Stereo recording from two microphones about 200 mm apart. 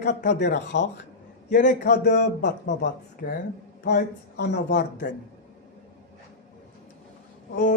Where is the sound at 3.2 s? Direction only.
45° left (ahead or behind).